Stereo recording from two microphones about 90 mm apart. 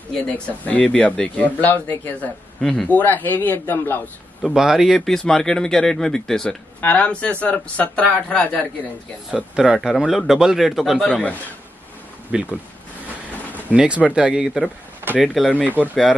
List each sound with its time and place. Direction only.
0.3 s speech: 15° left (ahead or behind)
2.6 s speech: centre (ahead or behind)
2.9 s a man's voice: 20° left (ahead or behind)
4.4 s speech: 5° right (ahead or behind)
6.8 s speech: 15° left (ahead or behind)
9.3 s speech: 5° right (ahead or behind)
12.3 s speech: 10° right (ahead or behind)
13.7 s speech: 15° right (ahead or behind)
15.7 s speech: 20° right (ahead or behind)